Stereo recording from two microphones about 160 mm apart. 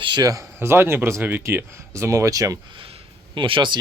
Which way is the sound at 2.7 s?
35° right (ahead or behind).